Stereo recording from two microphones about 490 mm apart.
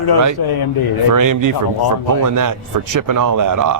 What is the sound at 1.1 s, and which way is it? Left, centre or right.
Music, right.